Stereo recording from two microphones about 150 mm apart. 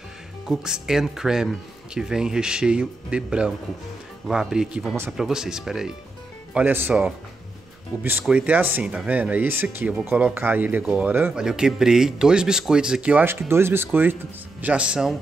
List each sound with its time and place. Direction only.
0.5 s speech: 5° right (ahead or behind)